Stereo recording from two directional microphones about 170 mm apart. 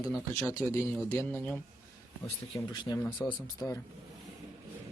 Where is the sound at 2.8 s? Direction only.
15° left (ahead or behind).